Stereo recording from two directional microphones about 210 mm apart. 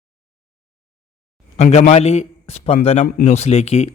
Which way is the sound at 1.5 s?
35° left (ahead or behind).